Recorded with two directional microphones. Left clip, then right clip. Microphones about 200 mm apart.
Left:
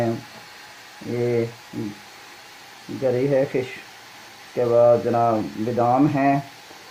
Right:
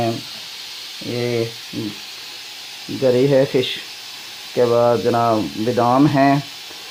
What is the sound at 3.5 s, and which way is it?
Speech, 45° right (ahead or behind).